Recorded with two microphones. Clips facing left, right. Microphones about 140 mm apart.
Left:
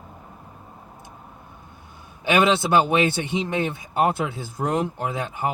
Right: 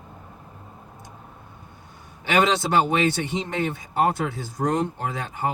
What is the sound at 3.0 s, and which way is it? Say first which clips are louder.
Speech: left 1 dB; 15° left (ahead or behind).